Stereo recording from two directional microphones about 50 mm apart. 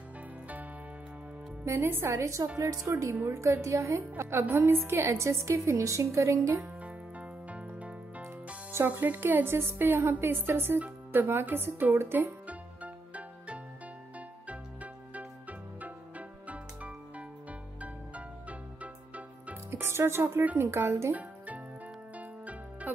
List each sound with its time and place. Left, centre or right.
1.6 s a woman's voice: right
2.0 s a woman's voice: right
3.3 s a woman's voice: right
4.2 s a woman's voice: right
5.0 s a woman's voice: right
6.3 s speech: right
6.8 s music: right
9.2 s speech: right
12.4 s music: right
19.7 s speech: right
21.1 s music: right